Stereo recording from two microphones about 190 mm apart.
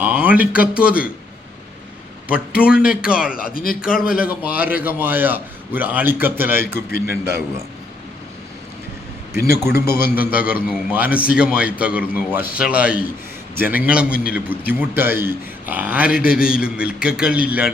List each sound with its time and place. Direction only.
0.0 s a sound: 10° right (ahead or behind)
0.7 s a man's voice: 5° right (ahead or behind)
2.3 s a man's voice: 5° right (ahead or behind)
3.3 s speech: 50° left (ahead or behind)
4.3 s a man's voice: 10° right (ahead or behind)
9.7 s a man's voice: 15° right (ahead or behind)